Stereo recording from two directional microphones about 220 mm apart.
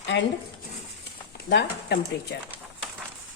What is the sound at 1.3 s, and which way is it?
Speech, 45° left (ahead or behind).